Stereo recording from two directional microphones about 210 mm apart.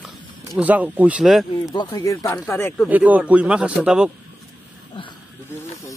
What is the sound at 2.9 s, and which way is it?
Speech, 5° right (ahead or behind).